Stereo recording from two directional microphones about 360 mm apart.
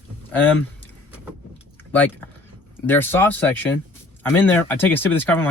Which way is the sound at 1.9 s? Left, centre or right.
Centre.